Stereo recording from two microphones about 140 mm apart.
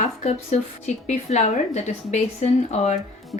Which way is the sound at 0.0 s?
55° left (ahead or behind).